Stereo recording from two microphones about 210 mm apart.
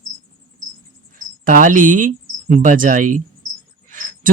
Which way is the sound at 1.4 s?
40° right (ahead or behind).